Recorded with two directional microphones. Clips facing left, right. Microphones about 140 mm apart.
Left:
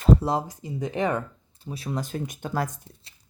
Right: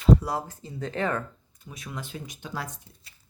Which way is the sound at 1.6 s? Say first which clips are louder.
Left 8 dB; 35° left (ahead or behind).